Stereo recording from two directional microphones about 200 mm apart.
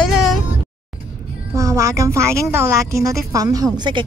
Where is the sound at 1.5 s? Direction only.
15° right (ahead or behind).